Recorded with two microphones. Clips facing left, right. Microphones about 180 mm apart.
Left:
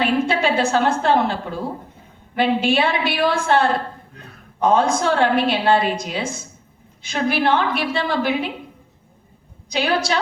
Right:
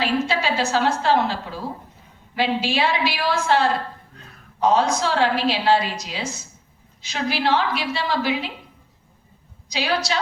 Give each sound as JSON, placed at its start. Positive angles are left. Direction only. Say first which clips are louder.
{"t": 0.0, "sound": "a woman's voice", "louder": "left 3 dB", "side_deg": 55}
{"t": 9.6, "sound": "a woman's voice", "louder": "left 3 dB", "side_deg": 55}